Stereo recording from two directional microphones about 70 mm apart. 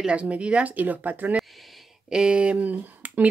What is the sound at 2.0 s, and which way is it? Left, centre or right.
Speech, centre.